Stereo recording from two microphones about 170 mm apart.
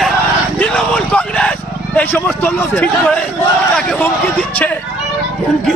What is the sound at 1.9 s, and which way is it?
A man's voice, 10° left (ahead or behind).